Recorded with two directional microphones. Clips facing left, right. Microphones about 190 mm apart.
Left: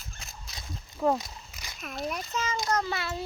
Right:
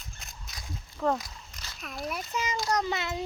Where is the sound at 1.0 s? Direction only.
15° left (ahead or behind).